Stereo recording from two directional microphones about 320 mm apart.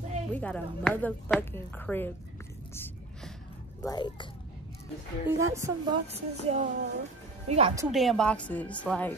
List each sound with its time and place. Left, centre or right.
0.3 s speech: centre
2.7 s music: centre
3.8 s speech: centre
5.2 s speech: centre
6.0 s child singing: centre
7.9 s speech: centre